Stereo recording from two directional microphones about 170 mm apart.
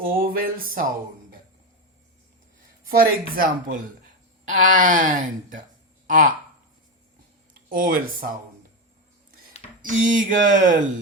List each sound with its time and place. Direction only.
0.0 s speech: 60° right (ahead or behind)
2.8 s speech: 60° right (ahead or behind)
7.7 s speech: 55° right (ahead or behind)
9.8 s speech: 50° right (ahead or behind)